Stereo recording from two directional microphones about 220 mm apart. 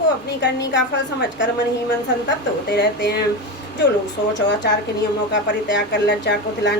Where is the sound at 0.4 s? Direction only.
50° left (ahead or behind).